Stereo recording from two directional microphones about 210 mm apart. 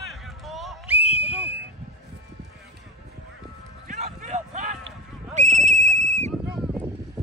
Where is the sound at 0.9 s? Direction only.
30° left (ahead or behind).